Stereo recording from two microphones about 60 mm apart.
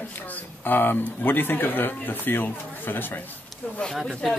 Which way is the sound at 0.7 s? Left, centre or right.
Left.